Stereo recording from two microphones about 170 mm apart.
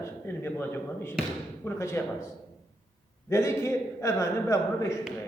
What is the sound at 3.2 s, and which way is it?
A man's voice, 15° left (ahead or behind).